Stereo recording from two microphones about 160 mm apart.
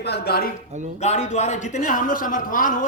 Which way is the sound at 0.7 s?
50° right (ahead or behind).